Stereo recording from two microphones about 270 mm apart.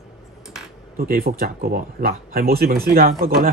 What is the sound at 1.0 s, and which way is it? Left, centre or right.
Speech, right.